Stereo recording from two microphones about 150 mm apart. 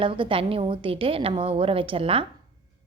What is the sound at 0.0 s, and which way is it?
A woman's voice, 35° right (ahead or behind).